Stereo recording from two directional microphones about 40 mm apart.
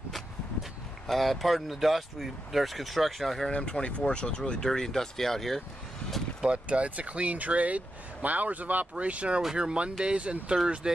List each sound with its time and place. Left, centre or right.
1.0 s speech: centre
3.4 s speech: left; by 5.6 s centre
6.4 s speech: right
8.9 s speech: right